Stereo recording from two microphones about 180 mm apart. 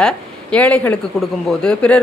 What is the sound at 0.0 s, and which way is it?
A woman's voice, 5° left (ahead or behind).